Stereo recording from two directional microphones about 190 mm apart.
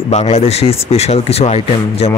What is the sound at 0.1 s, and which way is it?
Speech, 35° left (ahead or behind).